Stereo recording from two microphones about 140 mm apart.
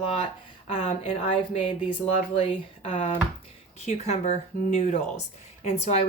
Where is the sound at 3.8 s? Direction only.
50° left (ahead or behind).